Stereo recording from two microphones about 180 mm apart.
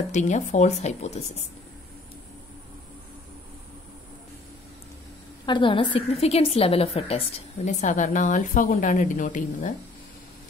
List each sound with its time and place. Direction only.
0.1 s a woman's voice: 40° left (ahead or behind)
5.4 s a woman's voice: 25° left (ahead or behind); by 9.8 s 45° left (ahead or behind)